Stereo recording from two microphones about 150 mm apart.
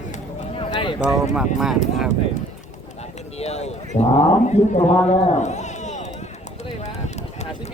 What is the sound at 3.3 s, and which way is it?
Speech, 45° left (ahead or behind).